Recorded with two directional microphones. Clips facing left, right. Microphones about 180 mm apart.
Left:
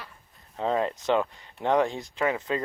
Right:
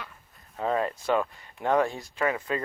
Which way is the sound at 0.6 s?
20° left (ahead or behind).